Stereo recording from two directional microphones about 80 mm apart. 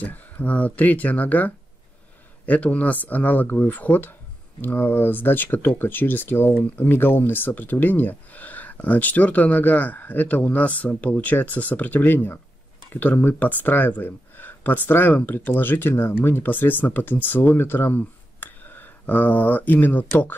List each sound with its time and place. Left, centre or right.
0.0 s speech: left